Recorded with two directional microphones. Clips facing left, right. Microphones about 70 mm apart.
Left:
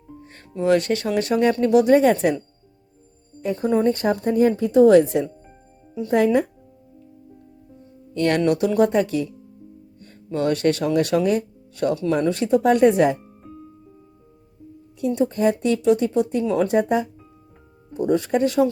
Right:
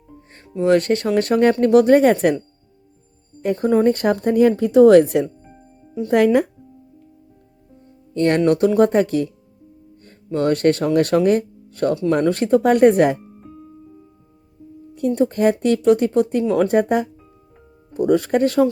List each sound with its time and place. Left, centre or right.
0.6 s speech: right
3.4 s speech: right
6.1 s speech: right
8.1 s speech: right
10.3 s speech: right
13.4 s music: centre
14.9 s speech: right